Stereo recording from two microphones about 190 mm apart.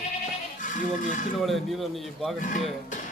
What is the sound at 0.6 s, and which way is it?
Speech, 40° left (ahead or behind).